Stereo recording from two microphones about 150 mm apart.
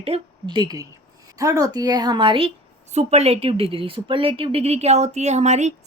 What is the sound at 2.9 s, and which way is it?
Speech, 45° right (ahead or behind).